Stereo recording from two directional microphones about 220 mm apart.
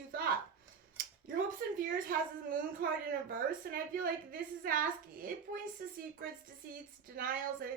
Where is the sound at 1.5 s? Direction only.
40° right (ahead or behind).